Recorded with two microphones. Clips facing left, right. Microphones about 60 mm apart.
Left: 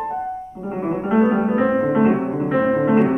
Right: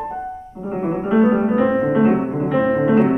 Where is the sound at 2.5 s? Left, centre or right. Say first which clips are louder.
Even; left.